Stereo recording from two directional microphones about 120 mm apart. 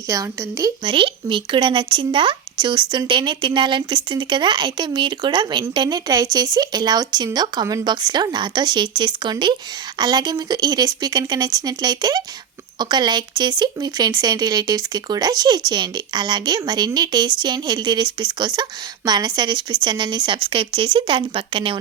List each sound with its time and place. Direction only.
0.1 s speech: 30° right (ahead or behind)
0.9 s speech: 45° right (ahead or behind)